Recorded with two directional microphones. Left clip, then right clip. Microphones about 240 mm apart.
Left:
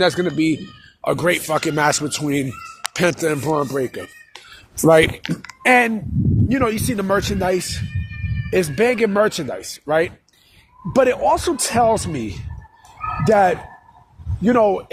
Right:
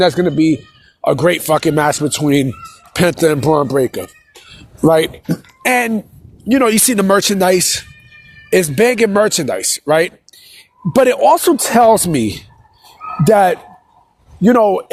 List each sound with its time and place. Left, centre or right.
0.0 s speech: right
6.5 s speech: right